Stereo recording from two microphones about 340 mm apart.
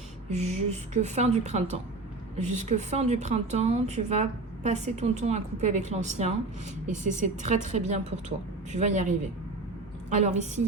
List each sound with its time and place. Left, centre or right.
0.3 s a woman's voice: centre